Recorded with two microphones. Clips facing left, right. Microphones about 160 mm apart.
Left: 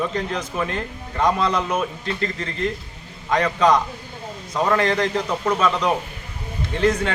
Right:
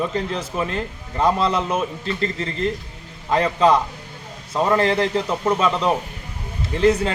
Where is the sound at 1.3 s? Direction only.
30° right (ahead or behind).